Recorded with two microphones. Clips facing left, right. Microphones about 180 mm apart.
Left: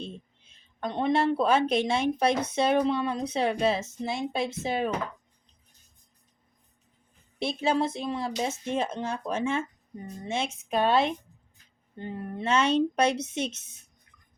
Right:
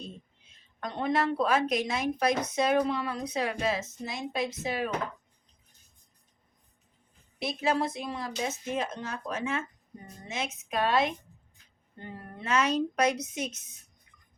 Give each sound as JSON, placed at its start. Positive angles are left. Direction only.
{"t": 0.8, "sound": "speech", "side_deg": 25}
{"t": 7.3, "sound": "speech", "side_deg": 25}